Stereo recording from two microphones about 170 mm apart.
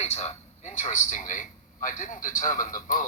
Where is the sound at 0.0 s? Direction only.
40° left (ahead or behind).